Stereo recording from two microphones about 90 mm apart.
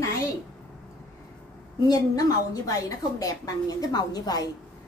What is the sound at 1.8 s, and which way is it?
A woman's voice, 45° left (ahead or behind).